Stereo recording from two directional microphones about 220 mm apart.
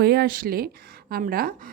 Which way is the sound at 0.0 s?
45° right (ahead or behind).